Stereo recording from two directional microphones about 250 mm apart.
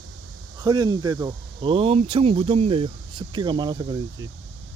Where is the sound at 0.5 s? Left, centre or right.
Centre.